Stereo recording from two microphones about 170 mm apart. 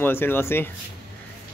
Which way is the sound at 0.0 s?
10° left (ahead or behind).